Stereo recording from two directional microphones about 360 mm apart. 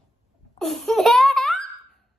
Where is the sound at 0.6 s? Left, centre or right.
Centre.